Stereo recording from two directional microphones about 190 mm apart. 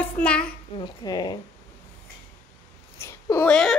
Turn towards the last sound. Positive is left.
turn(degrees=5)  # may be behind; listen again after turning